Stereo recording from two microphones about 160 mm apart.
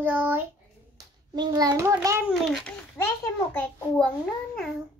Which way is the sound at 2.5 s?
Centre (ahead or behind).